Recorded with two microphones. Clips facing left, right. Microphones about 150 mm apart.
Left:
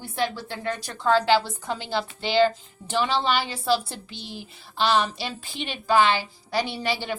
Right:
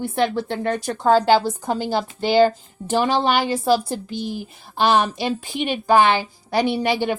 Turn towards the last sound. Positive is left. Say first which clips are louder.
# right 8 dB
turn(degrees=-50)  # may be behind; listen again after turning